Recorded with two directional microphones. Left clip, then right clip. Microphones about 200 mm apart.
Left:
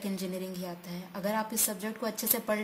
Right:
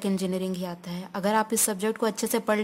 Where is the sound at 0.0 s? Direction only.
35° right (ahead or behind).